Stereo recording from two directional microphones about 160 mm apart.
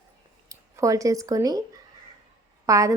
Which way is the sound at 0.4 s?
20° right (ahead or behind).